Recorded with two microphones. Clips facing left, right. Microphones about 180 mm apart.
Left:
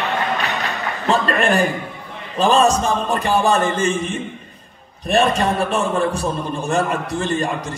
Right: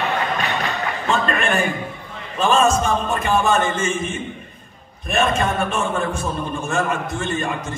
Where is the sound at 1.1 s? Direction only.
35° left (ahead or behind).